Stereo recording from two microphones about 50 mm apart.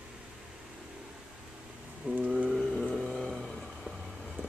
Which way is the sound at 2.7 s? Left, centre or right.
Left.